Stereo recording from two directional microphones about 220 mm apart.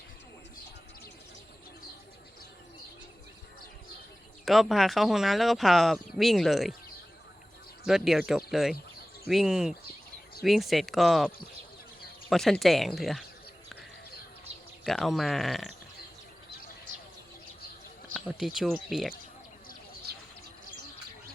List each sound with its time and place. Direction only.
4.4 s speech: centre (ahead or behind)
7.9 s speech: centre (ahead or behind)
12.3 s speech: centre (ahead or behind)
14.8 s speech: centre (ahead or behind)
18.1 s speech: centre (ahead or behind)